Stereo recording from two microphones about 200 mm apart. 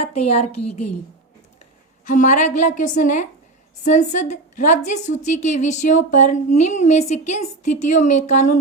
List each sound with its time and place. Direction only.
0.0 s a woman's voice: 30° left (ahead or behind)
2.0 s a woman's voice: 35° left (ahead or behind)